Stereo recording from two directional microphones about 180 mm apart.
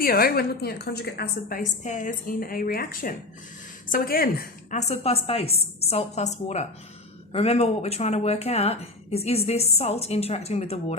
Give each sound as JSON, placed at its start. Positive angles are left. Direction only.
{"t": 0.0, "sound": "a woman's voice", "side_deg": 55}
{"t": 4.8, "sound": "speech", "side_deg": 35}